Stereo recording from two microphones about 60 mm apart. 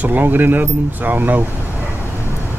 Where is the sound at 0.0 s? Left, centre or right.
Right.